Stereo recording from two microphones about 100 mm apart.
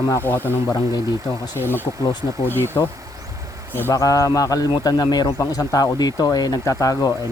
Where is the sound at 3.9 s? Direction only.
35° left (ahead or behind).